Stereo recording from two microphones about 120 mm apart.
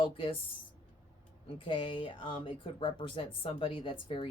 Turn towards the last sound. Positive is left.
turn(degrees=45)  # may be behind; listen again after turning